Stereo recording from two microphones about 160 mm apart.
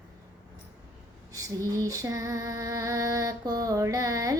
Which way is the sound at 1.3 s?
20° right (ahead or behind).